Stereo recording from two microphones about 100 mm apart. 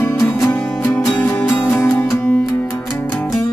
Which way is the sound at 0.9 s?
15° left (ahead or behind).